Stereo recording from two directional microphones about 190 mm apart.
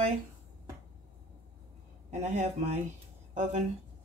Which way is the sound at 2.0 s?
35° right (ahead or behind).